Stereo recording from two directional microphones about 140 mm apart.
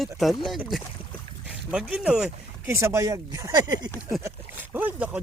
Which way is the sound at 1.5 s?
5° right (ahead or behind).